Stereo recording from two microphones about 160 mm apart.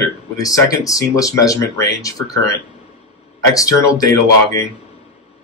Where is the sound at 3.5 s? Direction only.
20° left (ahead or behind).